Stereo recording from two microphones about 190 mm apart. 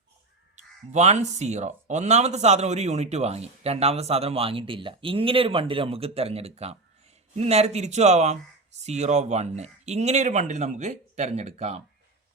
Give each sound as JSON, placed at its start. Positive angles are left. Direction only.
{"t": 0.5, "sound": "speech", "side_deg": -35}